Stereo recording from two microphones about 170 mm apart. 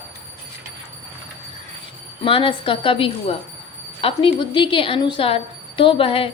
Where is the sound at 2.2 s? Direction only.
30° left (ahead or behind).